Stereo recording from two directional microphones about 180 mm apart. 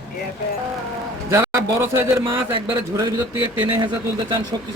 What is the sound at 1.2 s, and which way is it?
A man's voice, 15° right (ahead or behind).